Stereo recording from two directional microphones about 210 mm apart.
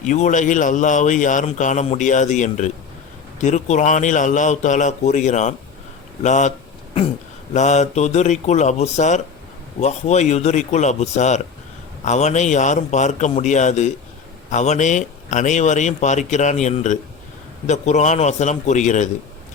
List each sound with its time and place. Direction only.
0.0 s a man's voice: 35° left (ahead or behind)
7.5 s a man's voice: 35° left (ahead or behind)